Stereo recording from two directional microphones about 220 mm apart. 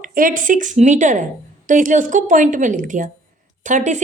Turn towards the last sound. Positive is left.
turn(degrees=-35)  # may be behind; listen again after turning